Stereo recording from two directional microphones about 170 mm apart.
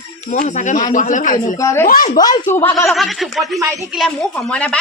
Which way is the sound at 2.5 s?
15° left (ahead or behind).